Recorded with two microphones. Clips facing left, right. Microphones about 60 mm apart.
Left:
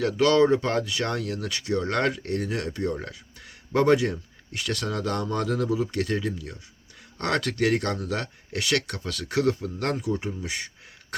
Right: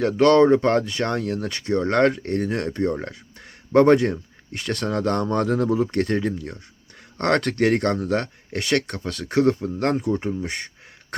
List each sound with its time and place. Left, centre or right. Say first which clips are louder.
0.0 s speech: right 5 dB; right